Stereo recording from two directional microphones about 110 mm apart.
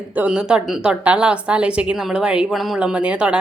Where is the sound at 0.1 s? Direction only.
10° right (ahead or behind).